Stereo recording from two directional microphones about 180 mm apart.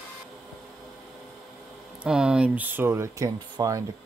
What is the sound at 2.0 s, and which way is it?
Speech, 5° right (ahead or behind).